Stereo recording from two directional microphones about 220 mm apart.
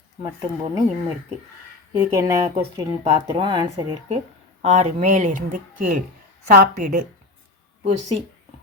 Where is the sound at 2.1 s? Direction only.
15° right (ahead or behind).